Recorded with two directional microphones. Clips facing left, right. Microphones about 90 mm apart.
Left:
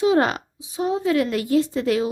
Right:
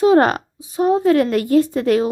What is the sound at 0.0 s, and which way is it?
A woman's voice, 50° right (ahead or behind).